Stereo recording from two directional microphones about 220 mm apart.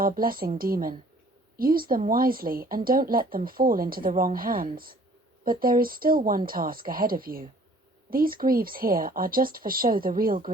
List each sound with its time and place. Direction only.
0.0 s speech: 40° right (ahead or behind)